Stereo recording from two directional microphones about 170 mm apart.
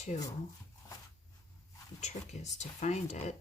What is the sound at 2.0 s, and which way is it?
Speech, 40° left (ahead or behind).